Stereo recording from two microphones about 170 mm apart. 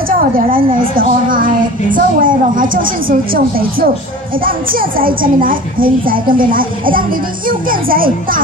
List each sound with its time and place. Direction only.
0.9 s a child's voice: 55° right (ahead or behind)